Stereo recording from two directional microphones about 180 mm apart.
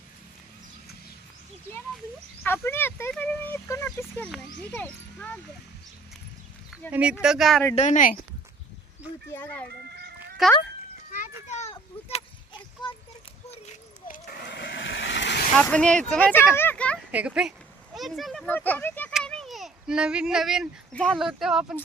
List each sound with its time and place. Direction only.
2.4 s speech: 10° left (ahead or behind)
6.9 s speech: 5° right (ahead or behind)
7.7 s a woman's voice: 40° left (ahead or behind)
9.3 s speech: 10° left (ahead or behind)
9.8 s goose: 65° right (ahead or behind)
11.4 s a sound: 40° left (ahead or behind)
14.0 s a sound: 50° left (ahead or behind)
14.4 s vehicle: 70° left (ahead or behind)
15.5 s speech: 5° left (ahead or behind)
16.5 s a sound: 10° left (ahead or behind)
17.1 s speech: 10° right (ahead or behind); by 19.1 s 10° left (ahead or behind)
19.1 s fowl: centre (ahead or behind)
20.9 s speech: 5° left (ahead or behind)